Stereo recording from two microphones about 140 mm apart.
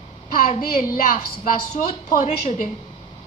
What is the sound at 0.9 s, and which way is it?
A woman's voice, 70° left (ahead or behind).